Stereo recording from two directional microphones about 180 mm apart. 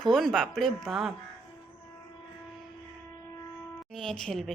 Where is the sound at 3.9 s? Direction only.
5° left (ahead or behind).